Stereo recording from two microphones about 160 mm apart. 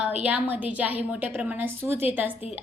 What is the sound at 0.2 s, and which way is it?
A woman's voice, 10° right (ahead or behind).